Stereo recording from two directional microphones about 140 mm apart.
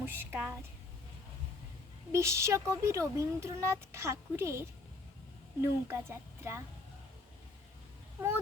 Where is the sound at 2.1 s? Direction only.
20° right (ahead or behind).